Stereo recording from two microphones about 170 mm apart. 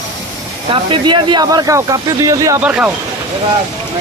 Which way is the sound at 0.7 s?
30° right (ahead or behind).